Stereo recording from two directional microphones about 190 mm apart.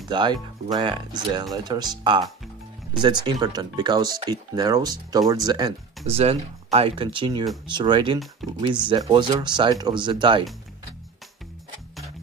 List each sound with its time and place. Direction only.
0.1 s speech: 25° right (ahead or behind)
6.0 s speech: 35° right (ahead or behind)
8.4 s speech: centre (ahead or behind)
8.8 s speech: 25° right (ahead or behind)